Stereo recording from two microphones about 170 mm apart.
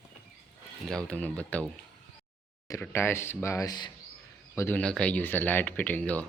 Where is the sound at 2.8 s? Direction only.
15° left (ahead or behind).